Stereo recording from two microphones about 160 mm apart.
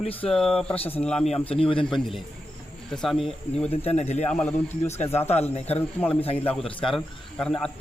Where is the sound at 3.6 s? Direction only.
40° left (ahead or behind).